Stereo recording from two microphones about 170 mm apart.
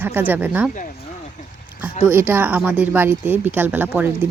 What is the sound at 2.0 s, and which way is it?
Speech, 10° right (ahead or behind).